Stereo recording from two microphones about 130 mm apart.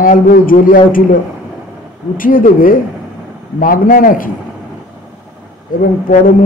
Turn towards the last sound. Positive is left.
turn(degrees=75)  # may be behind; listen again after turning